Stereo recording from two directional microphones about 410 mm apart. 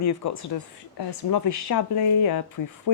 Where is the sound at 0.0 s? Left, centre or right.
Left.